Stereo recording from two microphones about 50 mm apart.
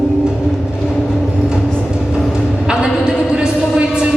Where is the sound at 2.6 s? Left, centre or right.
Centre.